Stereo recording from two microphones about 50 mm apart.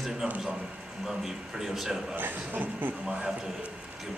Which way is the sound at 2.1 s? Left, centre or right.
Right.